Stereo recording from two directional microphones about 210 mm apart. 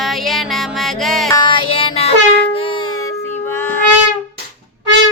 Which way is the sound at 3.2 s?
10° left (ahead or behind).